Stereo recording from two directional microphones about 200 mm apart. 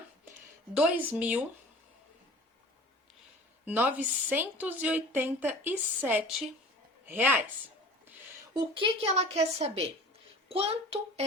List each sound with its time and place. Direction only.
0.7 s a woman's voice: 5° right (ahead or behind)
3.7 s a woman's voice: 10° right (ahead or behind)
8.5 s a child's voice: 25° right (ahead or behind)